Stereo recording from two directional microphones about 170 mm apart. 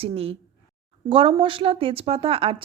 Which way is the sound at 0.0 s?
35° right (ahead or behind).